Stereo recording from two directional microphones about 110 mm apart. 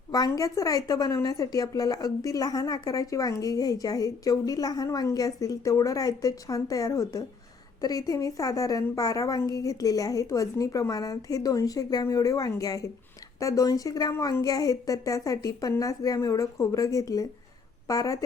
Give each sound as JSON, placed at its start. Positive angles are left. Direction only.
{"t": 0.1, "sound": "a woman's voice", "side_deg": 30}